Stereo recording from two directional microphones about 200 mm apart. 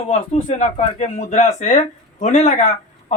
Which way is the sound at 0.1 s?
35° left (ahead or behind).